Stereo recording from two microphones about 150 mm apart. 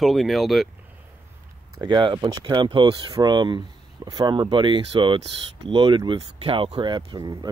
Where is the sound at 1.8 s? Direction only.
30° right (ahead or behind).